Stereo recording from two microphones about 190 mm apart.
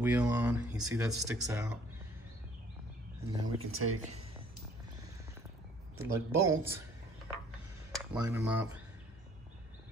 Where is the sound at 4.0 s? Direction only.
35° right (ahead or behind).